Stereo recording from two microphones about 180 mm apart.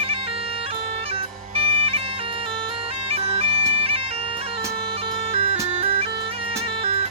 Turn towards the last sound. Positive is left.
turn(degrees=-30)  # may be behind; listen again after turning